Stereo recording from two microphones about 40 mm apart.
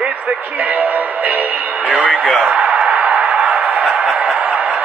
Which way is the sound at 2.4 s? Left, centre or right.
Right.